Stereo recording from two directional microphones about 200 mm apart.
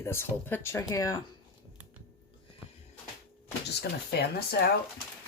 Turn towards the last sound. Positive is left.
turn(degrees=50)  # may be behind; listen again after turning